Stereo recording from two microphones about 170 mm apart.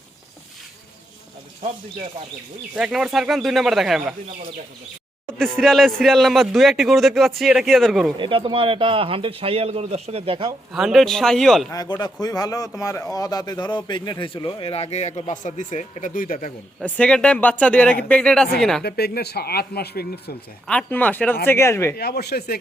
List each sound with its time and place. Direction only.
2.7 s a man's voice: 5° right (ahead or behind)
5.4 s a man's voice: 5° left (ahead or behind)
8.2 s speech: 30° right (ahead or behind)
10.7 s a man's voice: 5° right (ahead or behind)
11.7 s a man's voice: 20° left (ahead or behind); by 16.5 s 55° left (ahead or behind)
16.8 s speech: 5° left (ahead or behind)
18.8 s speech: 70° left (ahead or behind)
20.7 s speech: 10° left (ahead or behind)
21.9 s speech: 70° left (ahead or behind)